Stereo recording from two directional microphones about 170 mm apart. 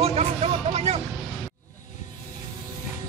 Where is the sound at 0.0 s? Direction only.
35° right (ahead or behind).